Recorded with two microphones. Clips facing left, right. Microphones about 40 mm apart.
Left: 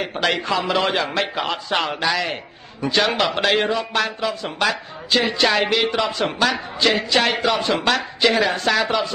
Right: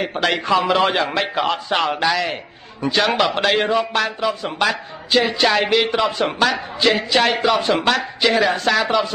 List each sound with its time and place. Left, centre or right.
0.0 s speech: centre